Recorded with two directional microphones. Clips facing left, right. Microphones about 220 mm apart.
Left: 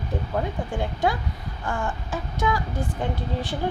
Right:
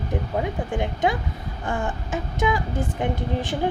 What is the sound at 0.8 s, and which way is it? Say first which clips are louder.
A woman's voice: right 1 dB; 20° right (ahead or behind).